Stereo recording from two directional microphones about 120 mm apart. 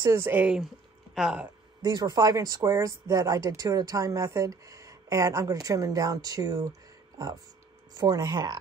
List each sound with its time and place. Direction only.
0.0 s speech: 25° right (ahead or behind); by 1.5 s 5° right (ahead or behind)
1.8 s speech: 35° right (ahead or behind)